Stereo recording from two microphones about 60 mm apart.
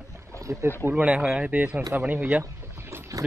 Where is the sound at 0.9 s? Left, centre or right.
Centre.